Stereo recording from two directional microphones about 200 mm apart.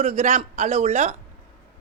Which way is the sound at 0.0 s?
35° right (ahead or behind).